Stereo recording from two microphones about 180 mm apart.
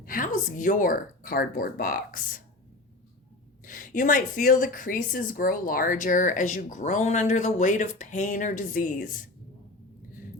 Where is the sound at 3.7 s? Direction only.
50° left (ahead or behind).